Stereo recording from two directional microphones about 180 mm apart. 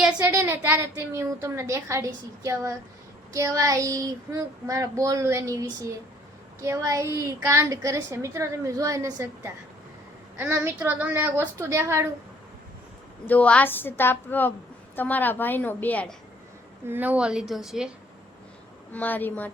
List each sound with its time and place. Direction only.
0.0 s a woman's voice: 10° right (ahead or behind)
13.2 s a woman's voice: 10° left (ahead or behind)
16.8 s a woman's voice: 10° right (ahead or behind)
18.9 s a woman's voice: 10° left (ahead or behind)